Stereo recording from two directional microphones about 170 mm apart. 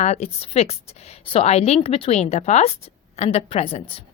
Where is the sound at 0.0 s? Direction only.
40° left (ahead or behind).